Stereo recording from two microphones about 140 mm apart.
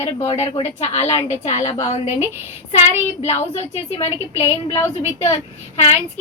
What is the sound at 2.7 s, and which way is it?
A woman's voice, 50° left (ahead or behind).